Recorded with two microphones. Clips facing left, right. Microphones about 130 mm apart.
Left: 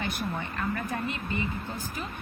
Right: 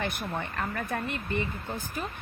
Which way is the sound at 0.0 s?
55° right (ahead or behind).